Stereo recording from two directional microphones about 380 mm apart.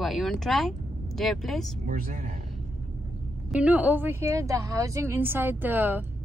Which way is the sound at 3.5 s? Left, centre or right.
Centre.